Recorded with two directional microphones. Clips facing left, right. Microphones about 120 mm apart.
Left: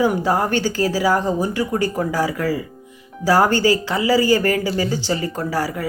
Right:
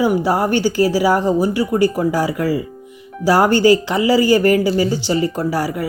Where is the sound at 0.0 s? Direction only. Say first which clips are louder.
Right 2 dB; 10° right (ahead or behind).